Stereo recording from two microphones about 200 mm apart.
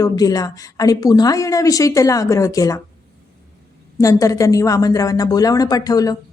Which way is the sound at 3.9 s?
15° left (ahead or behind).